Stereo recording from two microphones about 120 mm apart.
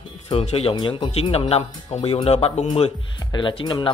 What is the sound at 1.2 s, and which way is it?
Speech, 55° left (ahead or behind).